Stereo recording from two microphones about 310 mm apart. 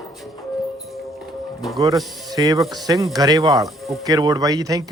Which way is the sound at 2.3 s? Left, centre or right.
Centre.